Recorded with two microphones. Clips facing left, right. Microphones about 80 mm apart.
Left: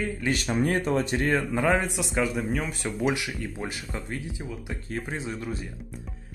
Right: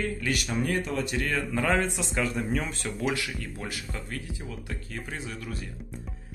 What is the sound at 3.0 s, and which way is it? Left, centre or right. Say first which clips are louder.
Speech: left 3 dB; centre.